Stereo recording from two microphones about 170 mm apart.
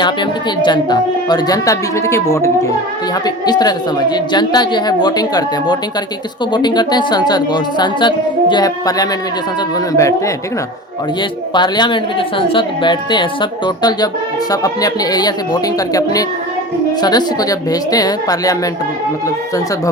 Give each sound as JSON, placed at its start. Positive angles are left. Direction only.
{"t": 0.0, "sound": "a woman's voice", "side_deg": 25}